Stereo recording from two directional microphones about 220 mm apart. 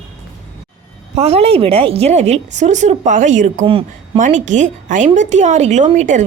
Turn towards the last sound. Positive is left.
turn(degrees=-35)  # may be behind; listen again after turning